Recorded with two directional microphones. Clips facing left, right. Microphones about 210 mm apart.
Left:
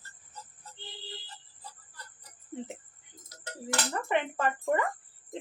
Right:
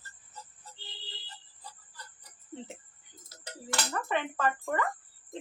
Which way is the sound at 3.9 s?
25° left (ahead or behind).